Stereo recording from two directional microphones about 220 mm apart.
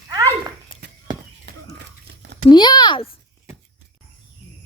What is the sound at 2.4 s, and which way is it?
Speech, 20° left (ahead or behind).